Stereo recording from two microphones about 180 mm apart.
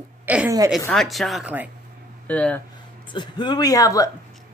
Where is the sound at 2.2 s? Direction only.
10° left (ahead or behind).